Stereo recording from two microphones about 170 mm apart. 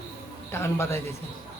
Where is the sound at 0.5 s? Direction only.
15° left (ahead or behind).